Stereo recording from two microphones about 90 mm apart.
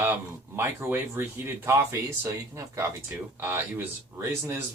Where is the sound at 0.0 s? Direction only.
25° right (ahead or behind).